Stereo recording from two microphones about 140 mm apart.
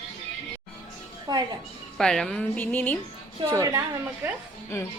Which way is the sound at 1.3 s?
30° right (ahead or behind).